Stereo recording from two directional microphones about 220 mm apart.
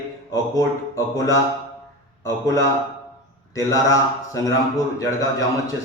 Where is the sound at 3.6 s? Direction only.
15° left (ahead or behind).